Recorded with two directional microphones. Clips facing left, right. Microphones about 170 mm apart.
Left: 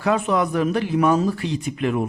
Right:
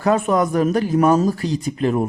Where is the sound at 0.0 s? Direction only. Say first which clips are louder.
Right 3 dB; 45° right (ahead or behind).